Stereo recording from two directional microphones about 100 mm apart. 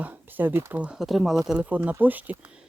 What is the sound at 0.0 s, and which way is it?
Speech, 20° right (ahead or behind).